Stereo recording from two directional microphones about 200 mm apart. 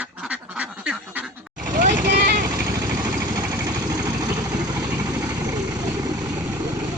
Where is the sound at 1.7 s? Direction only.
40° right (ahead or behind).